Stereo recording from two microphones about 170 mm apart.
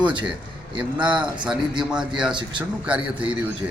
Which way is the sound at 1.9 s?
5° right (ahead or behind).